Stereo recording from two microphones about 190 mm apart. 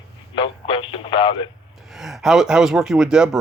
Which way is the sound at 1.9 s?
Centre (ahead or behind).